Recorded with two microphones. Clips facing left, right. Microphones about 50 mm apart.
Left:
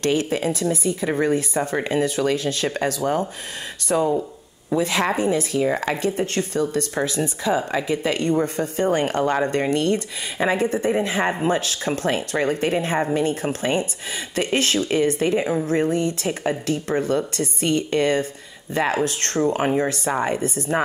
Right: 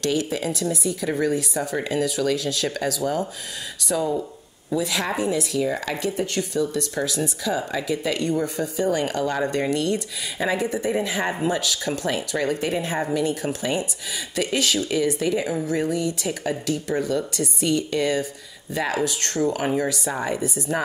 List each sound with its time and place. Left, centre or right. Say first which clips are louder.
0.0 s speech: left 3 dB; left